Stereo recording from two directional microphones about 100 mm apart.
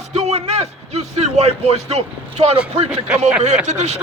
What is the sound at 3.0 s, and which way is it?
Speech, 10° right (ahead or behind).